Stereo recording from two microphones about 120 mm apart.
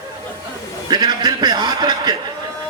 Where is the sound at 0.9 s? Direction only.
35° right (ahead or behind).